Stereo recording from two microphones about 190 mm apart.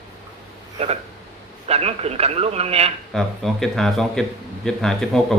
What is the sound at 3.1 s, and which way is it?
Speech, centre (ahead or behind).